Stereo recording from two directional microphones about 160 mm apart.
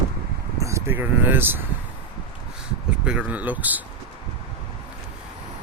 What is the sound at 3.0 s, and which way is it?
Speech, 10° right (ahead or behind).